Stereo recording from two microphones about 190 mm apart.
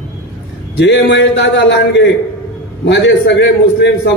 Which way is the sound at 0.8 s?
70° left (ahead or behind).